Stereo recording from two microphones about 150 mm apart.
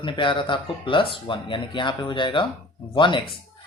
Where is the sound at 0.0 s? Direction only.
35° left (ahead or behind).